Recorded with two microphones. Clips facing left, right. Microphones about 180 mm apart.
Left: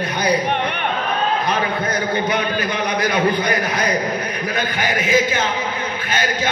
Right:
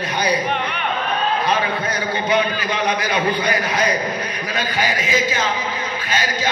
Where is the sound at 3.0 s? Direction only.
55° left (ahead or behind).